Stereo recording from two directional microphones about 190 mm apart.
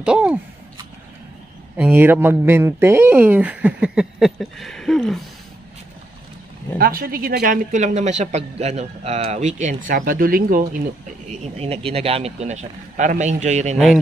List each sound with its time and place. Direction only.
0.0 s speech: 5° right (ahead or behind)
1.8 s speech: 10° right (ahead or behind)
6.8 s a man's voice: 50° right (ahead or behind)
11.2 s a man's voice: 35° right (ahead or behind)